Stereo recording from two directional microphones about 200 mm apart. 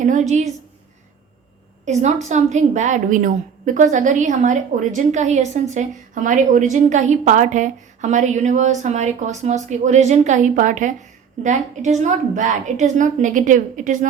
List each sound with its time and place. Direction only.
0.0 s a woman's voice: 35° right (ahead or behind)
1.8 s a woman's voice: 35° right (ahead or behind)